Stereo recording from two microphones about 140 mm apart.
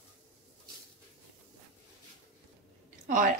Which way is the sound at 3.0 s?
75° right (ahead or behind).